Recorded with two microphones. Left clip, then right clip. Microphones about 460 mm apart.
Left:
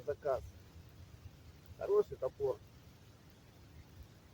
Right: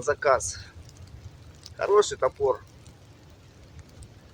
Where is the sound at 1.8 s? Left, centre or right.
Left.